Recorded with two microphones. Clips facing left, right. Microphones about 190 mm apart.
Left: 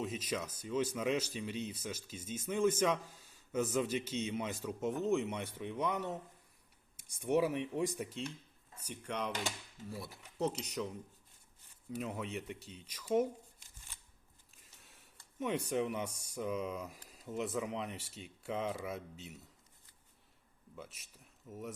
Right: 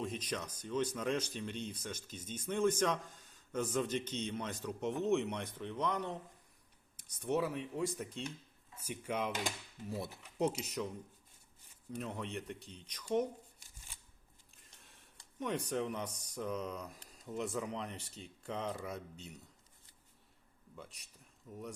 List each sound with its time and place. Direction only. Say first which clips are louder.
0.0 s speech: left 1 dB; 5° left (ahead or behind)
8.8 s speech: right 2 dB; 10° right (ahead or behind)
9.9 s speech: right 5 dB; 20° right (ahead or behind)
10.6 s speech: even; centre (ahead or behind)
11.9 s speech: left 2 dB; 5° left (ahead or behind)
14.5 s a sound: even; centre (ahead or behind)
15.4 s speech: left 2 dB; 5° left (ahead or behind)
20.7 s speech: left 2 dB; centre (ahead or behind)